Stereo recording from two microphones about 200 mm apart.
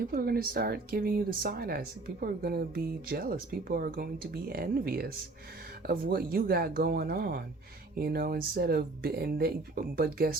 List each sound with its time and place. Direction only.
0.0 s speech: 50° right (ahead or behind)